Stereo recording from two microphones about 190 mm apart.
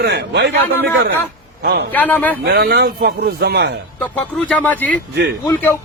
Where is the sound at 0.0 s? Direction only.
60° right (ahead or behind).